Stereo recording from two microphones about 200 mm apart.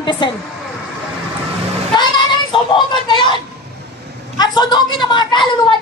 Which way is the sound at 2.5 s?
25° left (ahead or behind).